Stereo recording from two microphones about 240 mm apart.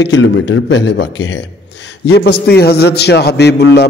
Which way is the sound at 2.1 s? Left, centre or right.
Left.